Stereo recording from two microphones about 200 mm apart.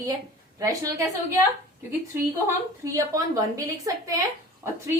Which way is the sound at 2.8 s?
15° right (ahead or behind).